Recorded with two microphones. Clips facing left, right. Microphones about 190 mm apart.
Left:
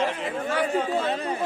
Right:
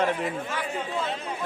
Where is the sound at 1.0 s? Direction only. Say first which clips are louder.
Left 4 dB; 55° left (ahead or behind).